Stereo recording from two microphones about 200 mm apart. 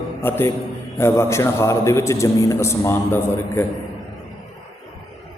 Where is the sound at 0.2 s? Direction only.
10° left (ahead or behind).